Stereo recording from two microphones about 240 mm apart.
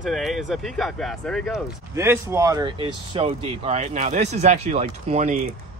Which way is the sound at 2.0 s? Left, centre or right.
Centre.